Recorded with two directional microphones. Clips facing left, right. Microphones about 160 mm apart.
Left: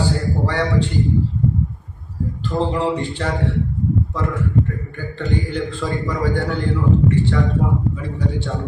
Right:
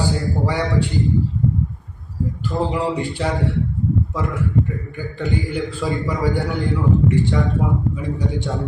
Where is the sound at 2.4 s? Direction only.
10° right (ahead or behind).